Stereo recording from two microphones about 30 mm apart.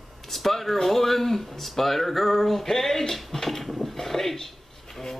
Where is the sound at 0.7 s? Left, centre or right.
Centre.